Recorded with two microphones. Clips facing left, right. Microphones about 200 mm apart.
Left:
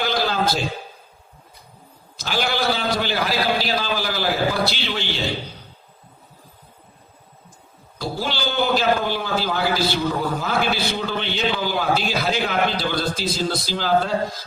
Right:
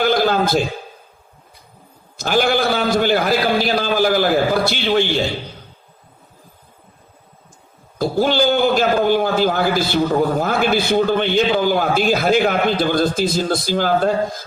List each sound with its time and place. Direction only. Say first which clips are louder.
0.0 s a sound: right 6 dB; 50° right (ahead or behind)
2.1 s a man's voice: right 7 dB; 50° right (ahead or behind)
7.9 s a man's voice: right 10 dB; 50° right (ahead or behind)